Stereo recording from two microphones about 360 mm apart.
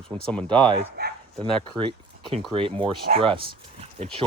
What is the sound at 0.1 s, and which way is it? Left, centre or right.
Speech, centre.